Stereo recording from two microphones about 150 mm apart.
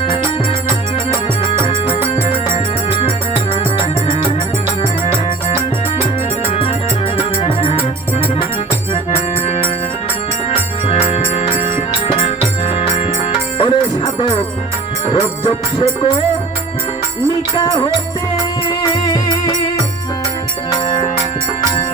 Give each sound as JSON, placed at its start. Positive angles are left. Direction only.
{"t": 2.5, "sound": "music", "side_deg": 40}
{"t": 7.2, "sound": "music", "side_deg": 40}
{"t": 10.8, "sound": "music", "side_deg": 45}
{"t": 13.6, "sound": "music", "side_deg": 35}
{"t": 18.8, "sound": "music", "side_deg": 25}